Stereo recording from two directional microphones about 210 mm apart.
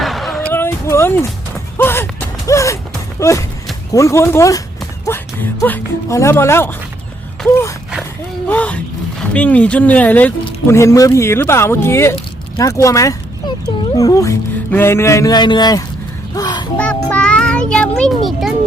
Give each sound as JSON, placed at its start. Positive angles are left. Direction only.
{"t": 0.0, "sound": "a sound", "side_deg": 0}
{"t": 1.8, "sound": "music", "side_deg": 10}
{"t": 3.9, "sound": "speech", "side_deg": 15}
{"t": 8.4, "sound": "speech", "side_deg": 5}
{"t": 16.3, "sound": "a sound", "side_deg": 20}
{"t": 16.7, "sound": "a child's voice", "side_deg": 5}